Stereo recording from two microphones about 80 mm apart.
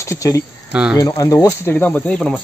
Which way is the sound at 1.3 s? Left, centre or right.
Left.